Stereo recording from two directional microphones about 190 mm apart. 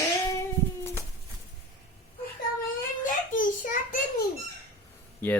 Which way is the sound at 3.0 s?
45° left (ahead or behind).